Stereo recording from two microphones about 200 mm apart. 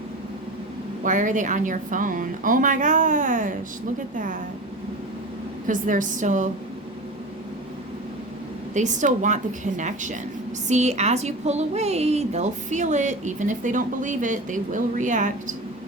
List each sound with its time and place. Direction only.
1.0 s a woman's voice: 40° right (ahead or behind)
5.6 s a woman's voice: 40° right (ahead or behind)
8.7 s a woman's voice: 35° right (ahead or behind)